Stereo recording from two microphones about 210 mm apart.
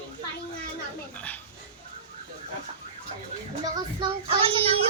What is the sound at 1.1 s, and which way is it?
Speech, 5° left (ahead or behind).